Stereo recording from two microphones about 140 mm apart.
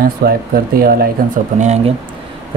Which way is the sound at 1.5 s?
55° right (ahead or behind).